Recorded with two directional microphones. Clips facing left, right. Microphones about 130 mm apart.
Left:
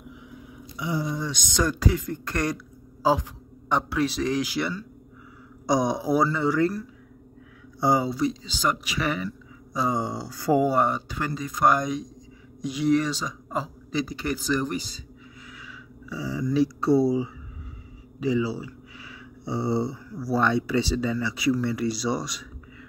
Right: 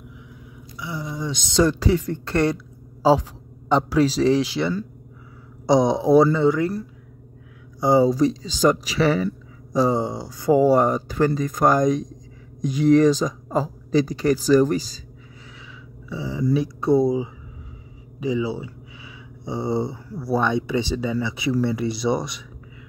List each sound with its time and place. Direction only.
0.7 s speech: 15° left (ahead or behind)
1.2 s speech: 25° right (ahead or behind)
8.0 s a man's voice: 40° right (ahead or behind); by 10.6 s 20° right (ahead or behind)
10.6 s a man's voice: 40° right (ahead or behind)
16.1 s speech: 20° right (ahead or behind)
18.2 s a sound: 20° right (ahead or behind)
20.1 s speech: 25° right (ahead or behind)